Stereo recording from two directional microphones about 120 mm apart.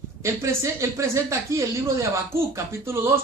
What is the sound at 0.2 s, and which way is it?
Speech, 25° right (ahead or behind).